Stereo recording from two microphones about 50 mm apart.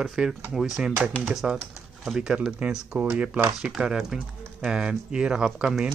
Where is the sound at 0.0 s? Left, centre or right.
Centre.